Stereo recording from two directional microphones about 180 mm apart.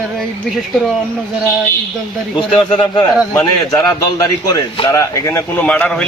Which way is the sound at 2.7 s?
25° left (ahead or behind).